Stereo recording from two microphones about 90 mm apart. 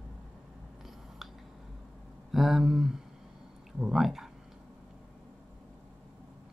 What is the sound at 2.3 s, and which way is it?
Speech, centre (ahead or behind).